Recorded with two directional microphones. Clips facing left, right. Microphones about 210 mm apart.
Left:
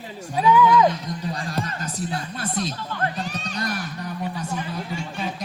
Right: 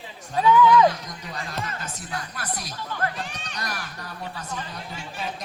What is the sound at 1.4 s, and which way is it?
Speech, 30° left (ahead or behind).